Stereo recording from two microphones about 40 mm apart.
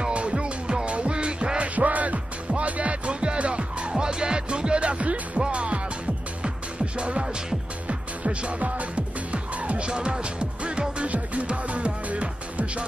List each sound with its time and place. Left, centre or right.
0.1 s music: right
1.8 s music: right
7.0 s music: right